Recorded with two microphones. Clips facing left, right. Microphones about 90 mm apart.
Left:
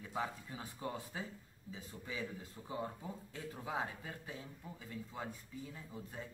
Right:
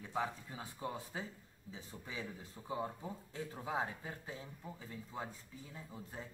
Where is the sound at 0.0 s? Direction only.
25° right (ahead or behind).